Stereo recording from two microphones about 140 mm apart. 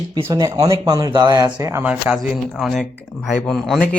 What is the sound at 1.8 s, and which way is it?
Speech, 10° right (ahead or behind).